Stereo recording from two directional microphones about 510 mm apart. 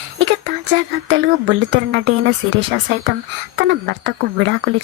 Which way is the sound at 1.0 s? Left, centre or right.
Right.